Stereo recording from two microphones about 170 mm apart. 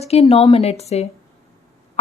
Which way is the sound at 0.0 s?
40° left (ahead or behind).